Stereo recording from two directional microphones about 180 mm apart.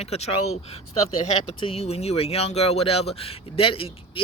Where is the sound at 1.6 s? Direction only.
35° left (ahead or behind).